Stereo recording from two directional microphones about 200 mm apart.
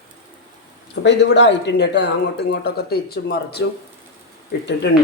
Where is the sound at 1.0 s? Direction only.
60° left (ahead or behind).